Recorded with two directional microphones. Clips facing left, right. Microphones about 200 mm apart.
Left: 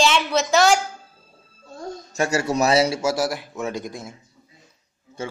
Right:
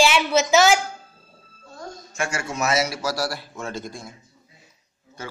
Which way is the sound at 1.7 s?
35° left (ahead or behind).